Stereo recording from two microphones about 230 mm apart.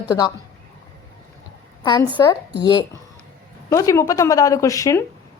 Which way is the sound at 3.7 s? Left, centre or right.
Centre.